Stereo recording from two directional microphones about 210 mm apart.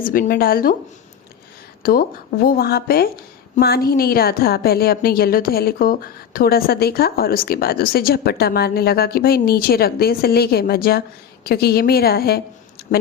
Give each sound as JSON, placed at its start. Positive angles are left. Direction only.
{"t": 0.0, "sound": "a woman's voice", "side_deg": 40}
{"t": 1.8, "sound": "a woman's voice", "side_deg": 45}
{"t": 12.9, "sound": "speech", "side_deg": 35}